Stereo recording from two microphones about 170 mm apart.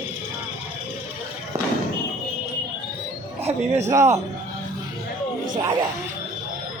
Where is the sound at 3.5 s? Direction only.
40° right (ahead or behind).